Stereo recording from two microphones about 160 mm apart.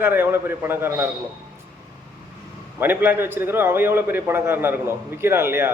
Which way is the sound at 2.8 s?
15° right (ahead or behind).